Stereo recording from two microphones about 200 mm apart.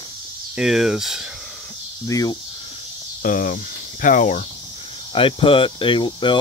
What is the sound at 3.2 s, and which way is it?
Speech, 45° left (ahead or behind).